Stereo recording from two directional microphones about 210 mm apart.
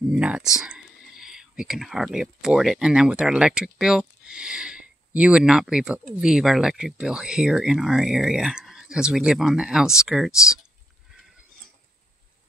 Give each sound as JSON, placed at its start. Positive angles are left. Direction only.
{"t": 0.1, "sound": "speech", "side_deg": -5}